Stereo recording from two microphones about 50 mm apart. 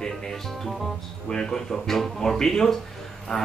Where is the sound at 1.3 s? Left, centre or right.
Centre.